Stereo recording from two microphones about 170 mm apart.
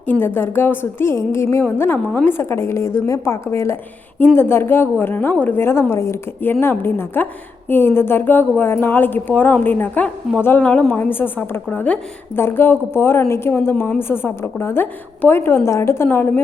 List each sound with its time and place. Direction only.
0.1 s a woman's voice: 10° left (ahead or behind)